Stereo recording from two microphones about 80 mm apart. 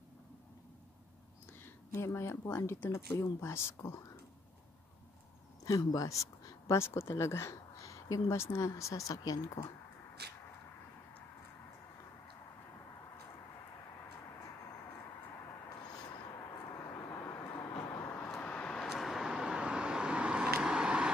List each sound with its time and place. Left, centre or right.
1.6 s speech: left
5.7 s speech: left
16.7 s vehicle: left
17.6 s vehicle: left
18.4 s vehicle: centre
18.9 s vehicle: centre